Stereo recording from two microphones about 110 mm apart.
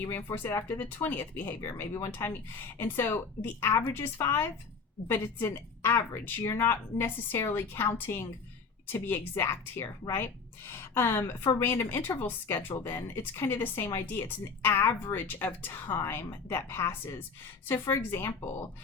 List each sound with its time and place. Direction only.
0.0 s a woman's voice: 20° left (ahead or behind)